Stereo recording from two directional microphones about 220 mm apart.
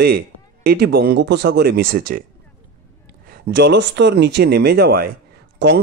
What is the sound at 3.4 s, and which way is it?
Speech, 50° right (ahead or behind).